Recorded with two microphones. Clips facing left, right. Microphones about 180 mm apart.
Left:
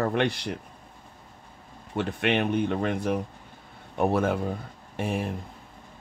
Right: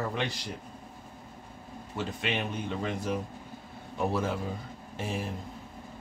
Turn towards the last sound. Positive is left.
turn(degrees=60)  # may be behind; listen again after turning